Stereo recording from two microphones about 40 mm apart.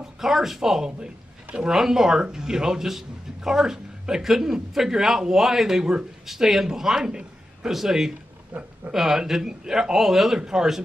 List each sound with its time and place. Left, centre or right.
0.0 s speech: centre
8.5 s speech: right
8.9 s speech: centre